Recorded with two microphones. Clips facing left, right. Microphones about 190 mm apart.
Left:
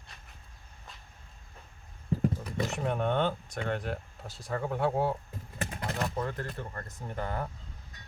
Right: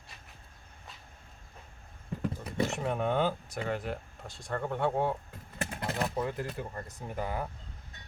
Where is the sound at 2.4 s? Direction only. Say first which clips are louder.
Right 1 dB; centre (ahead or behind).